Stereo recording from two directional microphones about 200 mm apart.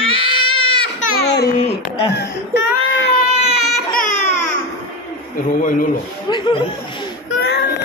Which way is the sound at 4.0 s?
40° left (ahead or behind).